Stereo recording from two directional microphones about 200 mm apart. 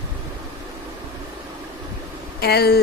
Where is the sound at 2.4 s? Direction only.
55° left (ahead or behind).